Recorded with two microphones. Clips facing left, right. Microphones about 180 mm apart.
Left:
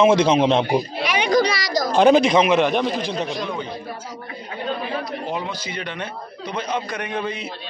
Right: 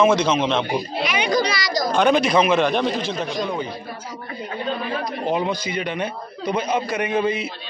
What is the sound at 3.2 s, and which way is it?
Speech, centre (ahead or behind).